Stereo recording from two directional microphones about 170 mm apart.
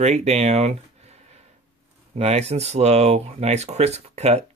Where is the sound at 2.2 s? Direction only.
40° right (ahead or behind).